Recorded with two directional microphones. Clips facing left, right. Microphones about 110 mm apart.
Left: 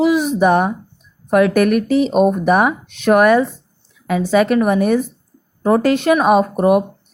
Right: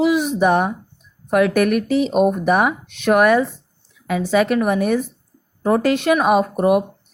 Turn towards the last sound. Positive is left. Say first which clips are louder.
# left 3 dB
turn(degrees=40)  # may be behind; listen again after turning